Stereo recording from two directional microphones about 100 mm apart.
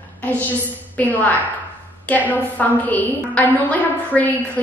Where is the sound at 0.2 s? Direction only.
15° left (ahead or behind).